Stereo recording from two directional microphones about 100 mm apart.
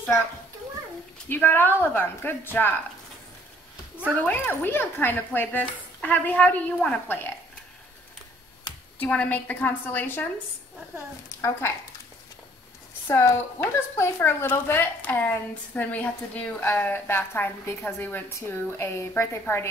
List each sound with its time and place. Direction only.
1.3 s a woman's voice: 20° left (ahead or behind)
4.2 s speech: 20° left (ahead or behind)
9.0 s speech: 15° left (ahead or behind)
13.1 s a woman's voice: 25° left (ahead or behind)